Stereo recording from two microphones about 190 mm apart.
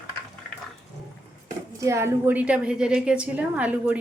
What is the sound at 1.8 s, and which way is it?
A woman's voice, 15° right (ahead or behind).